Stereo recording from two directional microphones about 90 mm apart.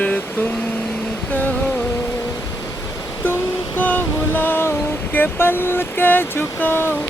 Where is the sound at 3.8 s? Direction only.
20° left (ahead or behind).